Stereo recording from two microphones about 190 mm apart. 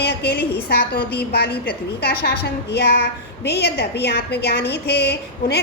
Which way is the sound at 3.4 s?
60° left (ahead or behind).